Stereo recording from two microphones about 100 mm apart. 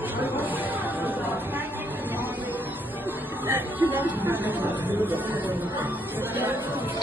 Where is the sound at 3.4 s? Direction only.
20° right (ahead or behind).